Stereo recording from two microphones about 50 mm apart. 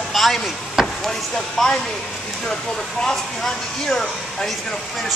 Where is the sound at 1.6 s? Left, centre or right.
Centre.